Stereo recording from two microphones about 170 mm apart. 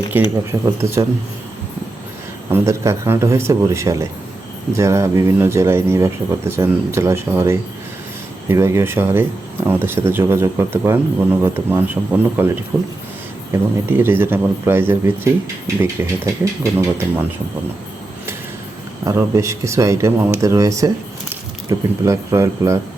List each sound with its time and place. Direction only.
0.1 s speech: 10° right (ahead or behind)
2.5 s speech: 15° right (ahead or behind)
13.5 s speech: 15° right (ahead or behind)
19.0 s speech: 15° right (ahead or behind)